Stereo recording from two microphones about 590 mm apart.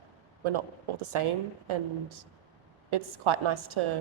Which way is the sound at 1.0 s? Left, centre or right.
Right.